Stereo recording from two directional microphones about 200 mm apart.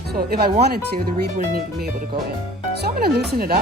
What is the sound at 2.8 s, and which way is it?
Speech, 50° right (ahead or behind).